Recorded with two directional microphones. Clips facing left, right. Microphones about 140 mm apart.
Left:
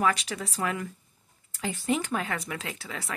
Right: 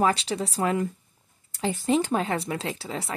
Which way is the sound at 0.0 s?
30° right (ahead or behind).